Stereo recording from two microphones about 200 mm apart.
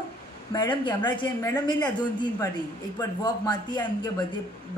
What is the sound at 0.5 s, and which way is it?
Speech, 20° left (ahead or behind).